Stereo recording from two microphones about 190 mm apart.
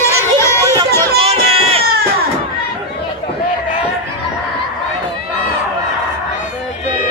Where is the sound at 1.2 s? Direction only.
30° right (ahead or behind).